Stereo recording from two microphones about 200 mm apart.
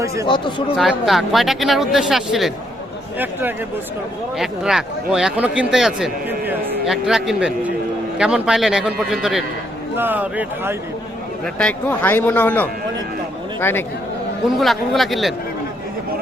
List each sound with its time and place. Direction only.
0.3 s speech: 25° left (ahead or behind)
0.8 s a man's voice: centre (ahead or behind)
4.4 s a man's voice: 5° right (ahead or behind)
11.5 s speech: 5° left (ahead or behind)
14.4 s a man's voice: centre (ahead or behind)